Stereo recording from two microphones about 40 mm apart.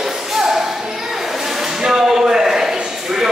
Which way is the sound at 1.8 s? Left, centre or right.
Centre.